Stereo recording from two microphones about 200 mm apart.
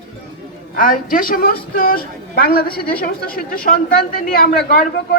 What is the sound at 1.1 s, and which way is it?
A man's voice, 45° left (ahead or behind).